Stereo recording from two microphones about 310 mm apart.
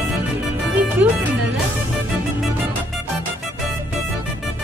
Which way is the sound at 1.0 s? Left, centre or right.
Centre.